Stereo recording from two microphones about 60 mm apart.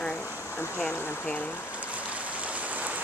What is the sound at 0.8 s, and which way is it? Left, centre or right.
Speech, centre.